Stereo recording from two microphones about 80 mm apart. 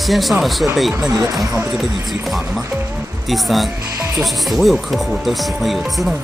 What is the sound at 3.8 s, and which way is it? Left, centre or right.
Speech, right.